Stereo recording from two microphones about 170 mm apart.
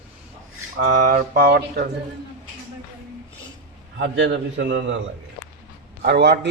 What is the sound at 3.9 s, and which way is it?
A man's voice, 90° right.